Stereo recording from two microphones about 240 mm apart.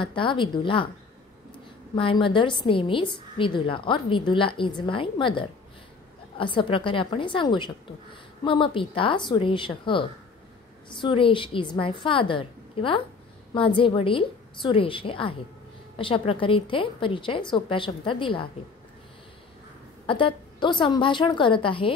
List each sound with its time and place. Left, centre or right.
0.0 s a woman's voice: left
2.0 s a woman's voice: left
20.1 s a woman's voice: left